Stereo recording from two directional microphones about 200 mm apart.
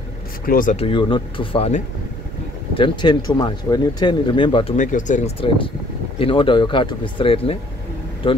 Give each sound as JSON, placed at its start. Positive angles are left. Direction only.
{"t": 0.5, "sound": "speech", "side_deg": 45}
{"t": 0.7, "sound": "speech", "side_deg": 25}
{"t": 4.7, "sound": "speech", "side_deg": 40}